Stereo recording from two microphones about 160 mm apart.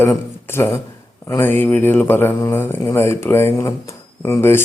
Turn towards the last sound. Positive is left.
turn(degrees=15)  # may be behind; listen again after turning